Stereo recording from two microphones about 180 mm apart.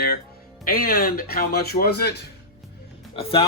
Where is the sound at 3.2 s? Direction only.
30° left (ahead or behind).